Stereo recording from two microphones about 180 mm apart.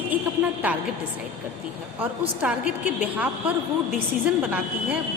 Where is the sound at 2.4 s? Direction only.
5° right (ahead or behind).